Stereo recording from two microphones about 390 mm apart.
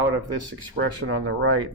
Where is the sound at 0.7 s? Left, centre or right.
Right.